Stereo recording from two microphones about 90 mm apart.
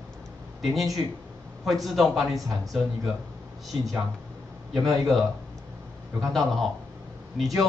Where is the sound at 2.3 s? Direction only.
40° right (ahead or behind).